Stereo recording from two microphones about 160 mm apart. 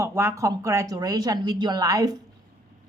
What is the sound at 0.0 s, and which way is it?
A woman's voice, 15° right (ahead or behind).